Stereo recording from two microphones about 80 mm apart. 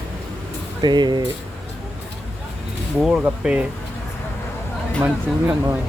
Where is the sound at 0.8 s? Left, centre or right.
Right.